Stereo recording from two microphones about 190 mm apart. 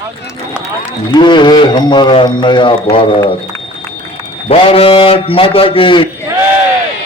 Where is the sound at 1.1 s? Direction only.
25° left (ahead or behind).